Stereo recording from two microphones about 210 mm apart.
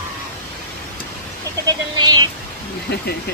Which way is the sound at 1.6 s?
20° right (ahead or behind).